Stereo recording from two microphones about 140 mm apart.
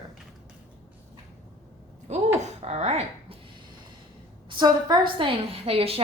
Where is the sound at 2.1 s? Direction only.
50° right (ahead or behind).